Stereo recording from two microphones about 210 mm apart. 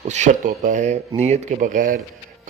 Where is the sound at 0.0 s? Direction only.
35° right (ahead or behind).